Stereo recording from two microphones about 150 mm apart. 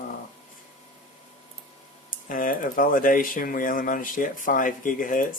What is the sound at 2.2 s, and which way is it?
Speech, 65° left (ahead or behind).